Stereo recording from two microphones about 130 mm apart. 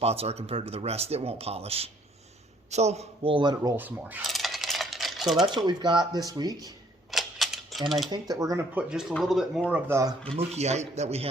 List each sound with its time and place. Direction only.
0.0 s a man's voice: 50° right (ahead or behind)
3.3 s speech: 30° right (ahead or behind)
3.8 s speech: 15° right (ahead or behind)
4.2 s coin: centre (ahead or behind)
5.5 s speech: 35° right (ahead or behind)
7.1 s typewriter: centre (ahead or behind)
8.1 s speech: 30° right (ahead or behind)
8.7 s speech: 5° right (ahead or behind)
9.9 s speech: 25° right (ahead or behind)
10.3 s speech: 55° right (ahead or behind)